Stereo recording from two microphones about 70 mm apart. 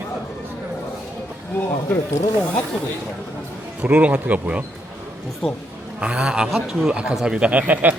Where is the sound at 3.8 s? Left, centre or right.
Right.